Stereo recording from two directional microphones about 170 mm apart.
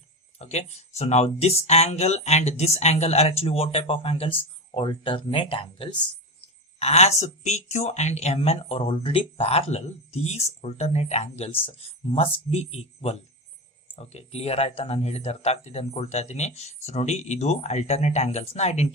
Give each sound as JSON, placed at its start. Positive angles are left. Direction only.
{"t": 0.3, "sound": "speech", "side_deg": 40}